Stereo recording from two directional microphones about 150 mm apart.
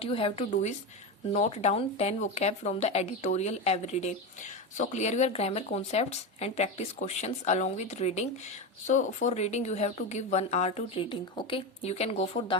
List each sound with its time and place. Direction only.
0.0 s speech: 40° left (ahead or behind)